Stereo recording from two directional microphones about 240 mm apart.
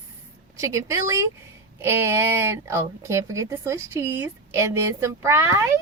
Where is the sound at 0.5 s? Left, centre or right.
Centre.